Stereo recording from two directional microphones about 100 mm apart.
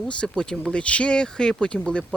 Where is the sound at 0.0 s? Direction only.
10° left (ahead or behind).